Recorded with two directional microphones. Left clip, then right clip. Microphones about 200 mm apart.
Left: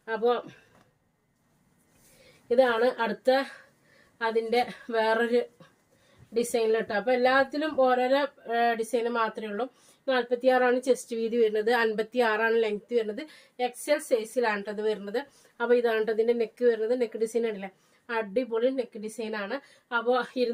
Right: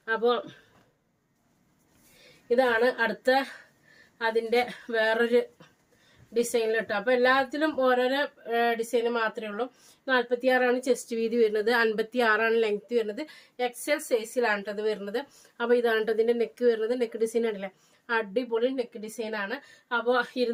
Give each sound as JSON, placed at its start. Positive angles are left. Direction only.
{"t": 0.0, "sound": "speech", "side_deg": -20}
{"t": 2.5, "sound": "a woman's voice", "side_deg": -25}